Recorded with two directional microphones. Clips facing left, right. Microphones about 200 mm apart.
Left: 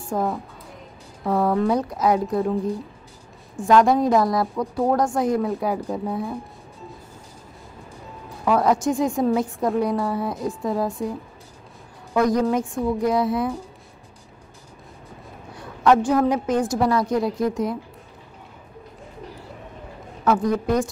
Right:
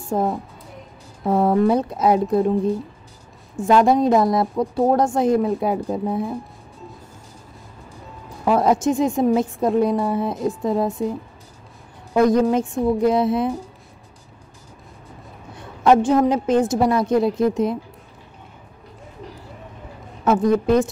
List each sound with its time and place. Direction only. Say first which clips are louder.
0.1 s a woman's voice: right 3 dB; 25° right (ahead or behind)
3.6 s a woman's voice: right 1 dB; 25° right (ahead or behind)
8.5 s a woman's voice: right 2 dB; 25° right (ahead or behind)
15.5 s a woman's voice: right 2 dB; 25° right (ahead or behind)
20.2 s a woman's voice: right 4 dB; 25° right (ahead or behind)